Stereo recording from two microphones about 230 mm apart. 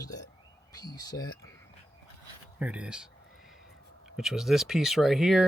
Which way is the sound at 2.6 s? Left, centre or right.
Centre.